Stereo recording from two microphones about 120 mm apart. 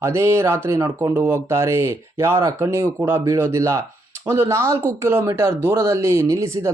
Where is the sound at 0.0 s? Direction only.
20° right (ahead or behind).